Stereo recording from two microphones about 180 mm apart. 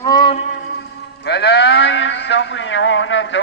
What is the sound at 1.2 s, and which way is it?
Sheep, 70° left (ahead or behind).